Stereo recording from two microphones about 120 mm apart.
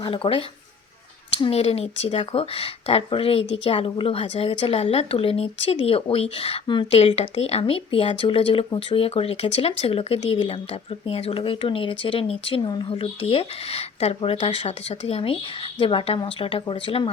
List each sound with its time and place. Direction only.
0.0 s speech: 45° left (ahead or behind)
6.9 s speech: 60° left (ahead or behind)
12.6 s speech: 35° left (ahead or behind)
12.9 s speech: 50° left (ahead or behind)